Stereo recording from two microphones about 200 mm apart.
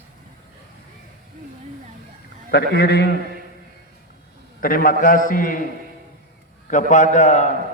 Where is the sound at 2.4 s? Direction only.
55° left (ahead or behind).